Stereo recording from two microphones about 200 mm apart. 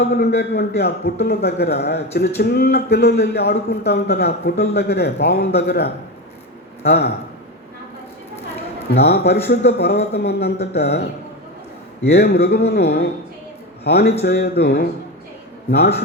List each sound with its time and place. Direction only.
0.1 s a man's voice: 55° left (ahead or behind)
8.9 s a man's voice: 55° left (ahead or behind)
12.1 s a man's voice: 55° left (ahead or behind)